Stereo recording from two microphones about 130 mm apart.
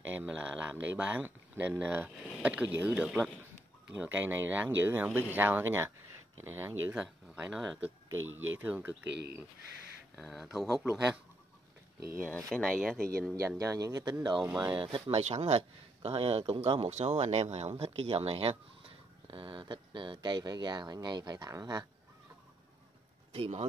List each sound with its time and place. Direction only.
0.0 s speech: 15° right (ahead or behind)
2.9 s speech: centre (ahead or behind)
4.0 s speech: 15° right (ahead or behind)
8.1 s speech: 15° right (ahead or behind)
10.1 s speech: centre (ahead or behind)
12.4 s speech: 5° left (ahead or behind)
13.6 s speech: 25° right (ahead or behind)
14.9 s speech: 45° right (ahead or behind); by 21.8 s 30° right (ahead or behind)
23.3 s speech: 50° right (ahead or behind)